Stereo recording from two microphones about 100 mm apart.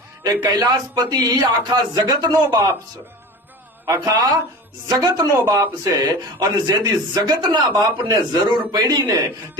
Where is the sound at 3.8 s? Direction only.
30° right (ahead or behind).